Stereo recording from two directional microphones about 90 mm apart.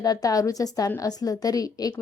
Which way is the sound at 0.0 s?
45° left (ahead or behind).